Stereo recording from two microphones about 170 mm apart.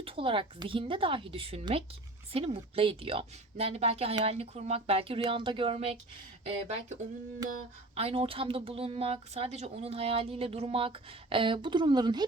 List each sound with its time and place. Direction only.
0.0 s a woman's voice: 30° right (ahead or behind)
7.9 s a woman's voice: 35° right (ahead or behind)